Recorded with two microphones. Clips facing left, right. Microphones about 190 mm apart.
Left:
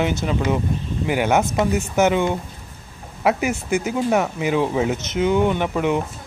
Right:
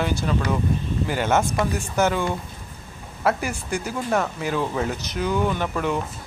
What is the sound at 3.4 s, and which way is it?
Speech, 20° left (ahead or behind).